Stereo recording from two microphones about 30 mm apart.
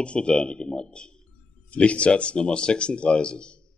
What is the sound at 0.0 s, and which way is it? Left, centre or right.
Speech, left.